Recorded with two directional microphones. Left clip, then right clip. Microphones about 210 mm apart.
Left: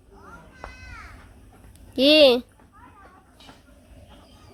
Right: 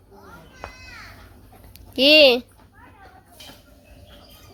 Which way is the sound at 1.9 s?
15° left (ahead or behind).